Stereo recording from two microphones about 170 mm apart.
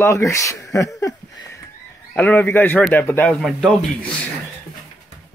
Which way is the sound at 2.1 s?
10° left (ahead or behind).